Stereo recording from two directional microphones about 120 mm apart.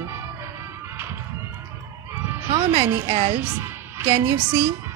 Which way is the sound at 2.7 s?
50° right (ahead or behind).